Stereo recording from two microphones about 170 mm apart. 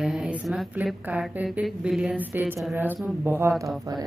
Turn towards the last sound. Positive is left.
turn(degrees=0)  # may be behind; listen again after turning